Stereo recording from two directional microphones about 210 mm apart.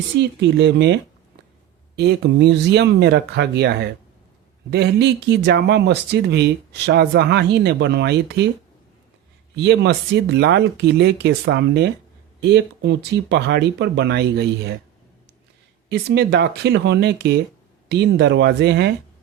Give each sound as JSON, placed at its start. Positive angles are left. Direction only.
{"t": 0.2, "sound": "speech", "side_deg": -55}
{"t": 2.0, "sound": "speech", "side_deg": -50}
{"t": 9.6, "sound": "speech", "side_deg": -55}
{"t": 15.9, "sound": "speech", "side_deg": -50}